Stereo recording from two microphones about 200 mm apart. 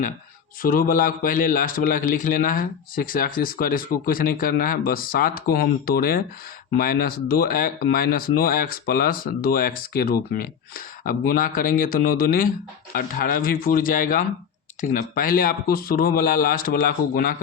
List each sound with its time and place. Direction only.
0.6 s speech: 45° left (ahead or behind)